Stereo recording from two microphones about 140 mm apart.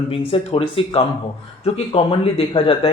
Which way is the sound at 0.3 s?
40° left (ahead or behind).